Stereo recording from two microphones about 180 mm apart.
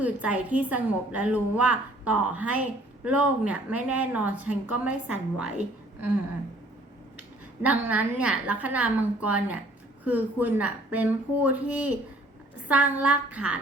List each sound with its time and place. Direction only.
0.0 s a woman's voice: 10° right (ahead or behind)
7.2 s a woman's voice: 10° right (ahead or behind)